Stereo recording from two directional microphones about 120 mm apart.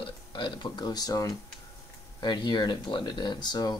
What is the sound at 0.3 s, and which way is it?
Speech, 40° left (ahead or behind).